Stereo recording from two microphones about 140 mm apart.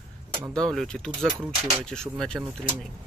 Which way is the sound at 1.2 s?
10° right (ahead or behind).